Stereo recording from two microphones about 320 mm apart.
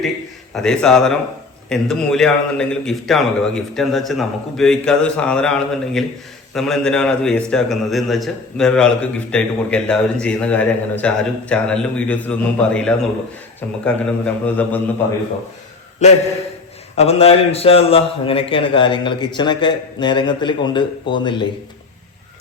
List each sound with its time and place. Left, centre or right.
0.5 s a man's voice: centre
16.0 s a man's voice: left